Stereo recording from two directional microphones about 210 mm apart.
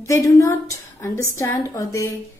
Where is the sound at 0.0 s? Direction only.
15° left (ahead or behind).